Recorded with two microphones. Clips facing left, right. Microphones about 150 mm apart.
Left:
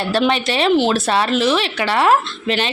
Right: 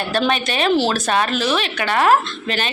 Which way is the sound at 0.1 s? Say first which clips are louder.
Left 3 dB; 25° left (ahead or behind).